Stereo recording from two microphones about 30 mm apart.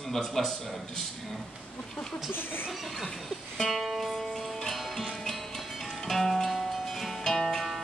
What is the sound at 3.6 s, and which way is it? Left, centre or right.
Music, centre.